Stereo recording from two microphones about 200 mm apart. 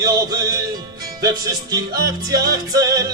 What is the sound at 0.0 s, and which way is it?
Music, 20° right (ahead or behind).